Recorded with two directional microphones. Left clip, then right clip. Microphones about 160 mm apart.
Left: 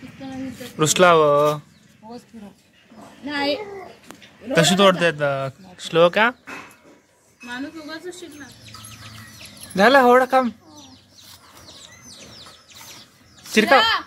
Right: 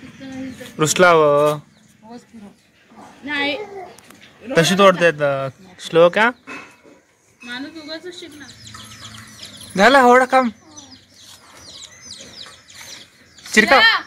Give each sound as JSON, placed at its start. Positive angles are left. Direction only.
{"t": 0.7, "sound": "speech", "side_deg": -5}
{"t": 3.3, "sound": "a child's voice", "side_deg": 20}
{"t": 4.6, "sound": "speech", "side_deg": -10}
{"t": 7.5, "sound": "speech", "side_deg": 15}
{"t": 9.8, "sound": "speech", "side_deg": -5}
{"t": 13.5, "sound": "speech", "side_deg": -5}